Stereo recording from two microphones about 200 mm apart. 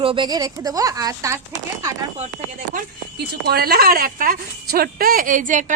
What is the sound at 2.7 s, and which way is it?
Speech, 50° right (ahead or behind).